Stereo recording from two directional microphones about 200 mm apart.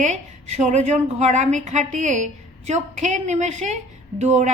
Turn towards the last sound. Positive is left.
turn(degrees=-35)  # may be behind; listen again after turning